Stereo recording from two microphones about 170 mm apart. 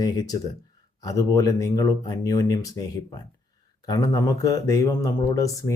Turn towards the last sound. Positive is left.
turn(degrees=20)  # may be behind; listen again after turning